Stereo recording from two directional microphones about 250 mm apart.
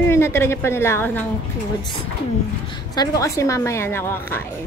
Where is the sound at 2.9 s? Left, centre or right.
Centre.